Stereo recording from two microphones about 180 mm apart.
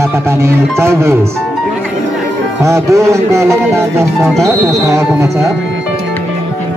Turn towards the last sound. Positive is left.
turn(degrees=-15)  # may be behind; listen again after turning